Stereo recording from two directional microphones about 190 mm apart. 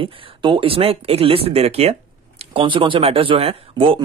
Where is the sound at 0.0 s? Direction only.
25° right (ahead or behind).